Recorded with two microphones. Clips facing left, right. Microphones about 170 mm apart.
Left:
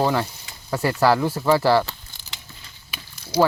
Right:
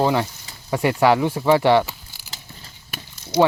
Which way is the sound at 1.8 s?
10° right (ahead or behind).